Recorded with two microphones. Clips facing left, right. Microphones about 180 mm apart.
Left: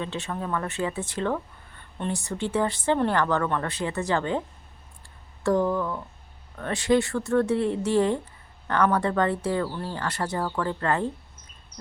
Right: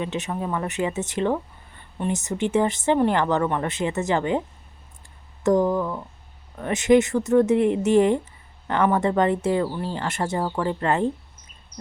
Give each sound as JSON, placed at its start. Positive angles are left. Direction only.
{"t": 0.0, "sound": "speech", "side_deg": -15}